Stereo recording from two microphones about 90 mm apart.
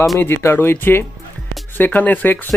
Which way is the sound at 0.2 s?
25° left (ahead or behind).